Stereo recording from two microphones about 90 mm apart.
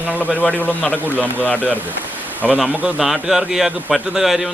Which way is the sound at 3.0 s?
5° right (ahead or behind).